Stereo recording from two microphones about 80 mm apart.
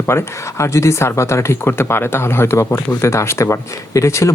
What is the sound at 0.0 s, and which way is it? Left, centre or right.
Speech, left.